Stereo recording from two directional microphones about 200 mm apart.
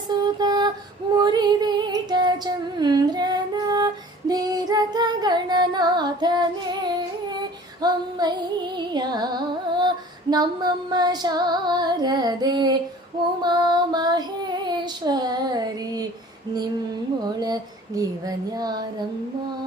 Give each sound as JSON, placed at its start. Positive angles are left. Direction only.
{"t": 0.3, "sound": "music", "side_deg": -20}
{"t": 1.2, "sound": "female singing", "side_deg": -20}
{"t": 4.3, "sound": "music", "side_deg": -20}
{"t": 7.8, "sound": "music", "side_deg": -20}
{"t": 13.4, "sound": "child singing", "side_deg": -20}
{"t": 17.2, "sound": "a sound", "side_deg": -20}